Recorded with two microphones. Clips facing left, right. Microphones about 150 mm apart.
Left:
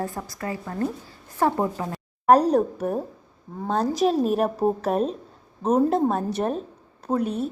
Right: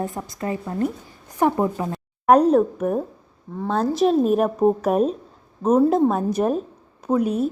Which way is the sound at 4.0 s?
Centre (ahead or behind).